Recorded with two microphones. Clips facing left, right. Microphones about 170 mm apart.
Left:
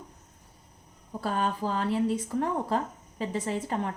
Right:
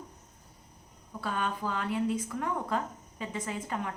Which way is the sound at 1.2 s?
35° left (ahead or behind).